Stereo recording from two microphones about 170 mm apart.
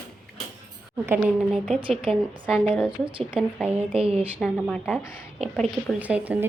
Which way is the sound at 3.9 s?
35° right (ahead or behind).